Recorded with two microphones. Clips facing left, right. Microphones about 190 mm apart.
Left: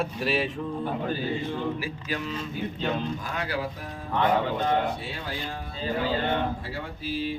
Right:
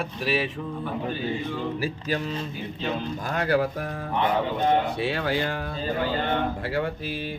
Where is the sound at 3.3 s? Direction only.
50° right (ahead or behind).